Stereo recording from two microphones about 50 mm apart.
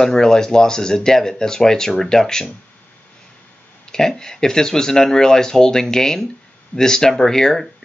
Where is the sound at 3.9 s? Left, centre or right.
Centre.